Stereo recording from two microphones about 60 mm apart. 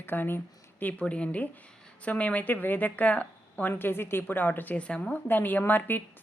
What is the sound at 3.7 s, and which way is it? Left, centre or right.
A woman's voice, left.